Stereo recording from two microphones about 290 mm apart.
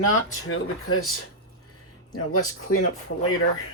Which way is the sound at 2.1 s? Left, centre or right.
Left.